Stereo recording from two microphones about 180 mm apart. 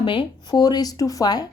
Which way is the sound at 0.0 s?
25° left (ahead or behind).